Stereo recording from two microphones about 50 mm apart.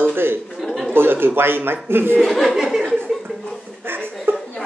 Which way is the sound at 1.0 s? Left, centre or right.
Right.